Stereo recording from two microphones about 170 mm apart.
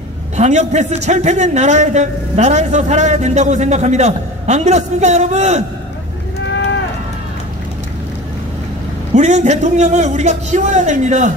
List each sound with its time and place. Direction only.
0.4 s a man's voice: 45° right (ahead or behind)
9.1 s a man's voice: 40° right (ahead or behind)